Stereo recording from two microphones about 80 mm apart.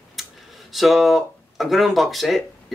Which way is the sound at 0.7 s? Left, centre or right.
Centre.